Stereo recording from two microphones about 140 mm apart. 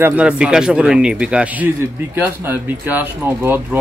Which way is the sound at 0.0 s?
10° right (ahead or behind).